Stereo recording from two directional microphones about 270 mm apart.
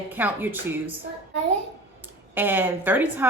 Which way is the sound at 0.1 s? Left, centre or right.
Centre.